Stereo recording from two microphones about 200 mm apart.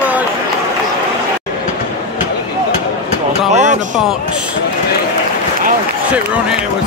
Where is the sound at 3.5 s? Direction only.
35° right (ahead or behind).